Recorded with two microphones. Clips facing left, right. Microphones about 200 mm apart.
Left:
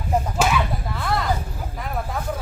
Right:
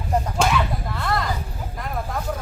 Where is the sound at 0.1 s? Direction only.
5° left (ahead or behind).